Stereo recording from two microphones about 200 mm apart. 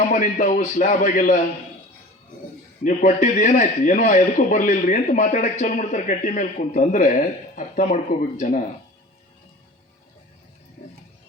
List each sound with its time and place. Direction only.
0.1 s a man's voice: 40° left (ahead or behind)
2.8 s a man's voice: 40° left (ahead or behind)